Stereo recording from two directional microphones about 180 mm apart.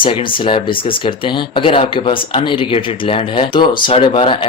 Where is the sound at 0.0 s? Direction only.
30° left (ahead or behind).